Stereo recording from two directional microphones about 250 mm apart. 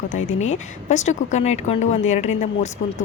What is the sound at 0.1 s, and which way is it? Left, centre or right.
A woman's voice, left.